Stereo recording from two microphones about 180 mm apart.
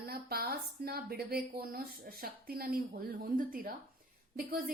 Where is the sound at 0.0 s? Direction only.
60° right (ahead or behind).